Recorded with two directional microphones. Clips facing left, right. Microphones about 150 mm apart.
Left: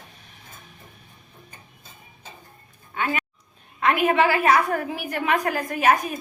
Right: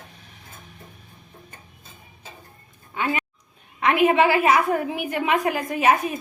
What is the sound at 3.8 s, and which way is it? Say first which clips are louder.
A woman's voice: right 2 dB; 25° right (ahead or behind).